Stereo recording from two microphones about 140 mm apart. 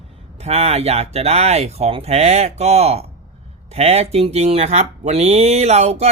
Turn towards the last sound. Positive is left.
turn(degrees=-50)  # may be behind; listen again after turning